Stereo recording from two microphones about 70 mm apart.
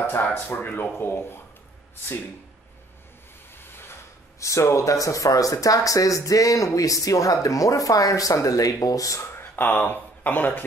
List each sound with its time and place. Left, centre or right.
0.0 s speech: left
3.5 s speech: left
9.3 s speech: left